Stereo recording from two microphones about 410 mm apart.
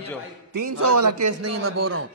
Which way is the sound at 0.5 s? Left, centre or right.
Right.